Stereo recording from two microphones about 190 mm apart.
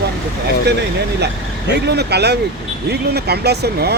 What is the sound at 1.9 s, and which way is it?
Speech, 60° right (ahead or behind).